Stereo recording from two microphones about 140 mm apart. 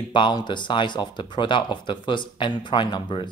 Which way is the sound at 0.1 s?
35° left (ahead or behind).